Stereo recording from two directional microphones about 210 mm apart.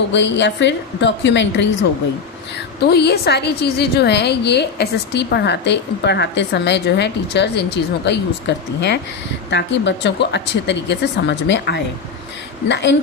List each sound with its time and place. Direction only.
0.1 s speech: 55° left (ahead or behind)
2.8 s a woman's voice: 50° left (ahead or behind)